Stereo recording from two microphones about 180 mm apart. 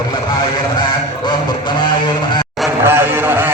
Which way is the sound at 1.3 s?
25° left (ahead or behind).